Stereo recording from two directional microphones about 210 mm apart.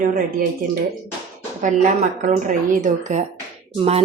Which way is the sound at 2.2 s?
35° right (ahead or behind).